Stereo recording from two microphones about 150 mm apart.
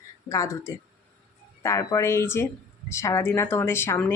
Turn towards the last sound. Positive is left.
turn(degrees=15)  # may be behind; listen again after turning